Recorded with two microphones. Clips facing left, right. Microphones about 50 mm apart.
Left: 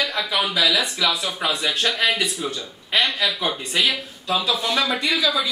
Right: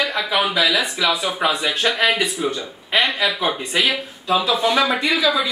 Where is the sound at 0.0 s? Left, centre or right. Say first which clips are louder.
Right 3 dB; centre.